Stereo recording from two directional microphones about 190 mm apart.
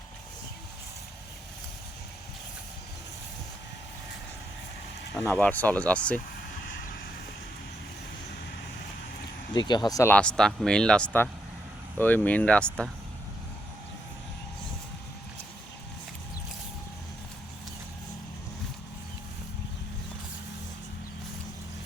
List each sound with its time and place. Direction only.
5.1 s speech: 10° left (ahead or behind)
6.1 s vehicle: 45° left (ahead or behind)
9.5 s speech: 25° left (ahead or behind); by 12.9 s 5° left (ahead or behind)